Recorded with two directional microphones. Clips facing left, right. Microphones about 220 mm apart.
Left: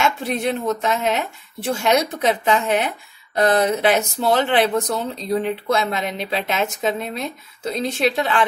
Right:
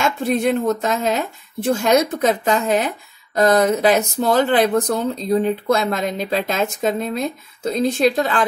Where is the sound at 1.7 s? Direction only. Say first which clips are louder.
Right 3 dB; 45° right (ahead or behind).